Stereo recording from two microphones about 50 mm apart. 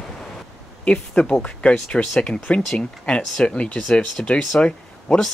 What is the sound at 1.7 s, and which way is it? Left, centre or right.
Speech, centre.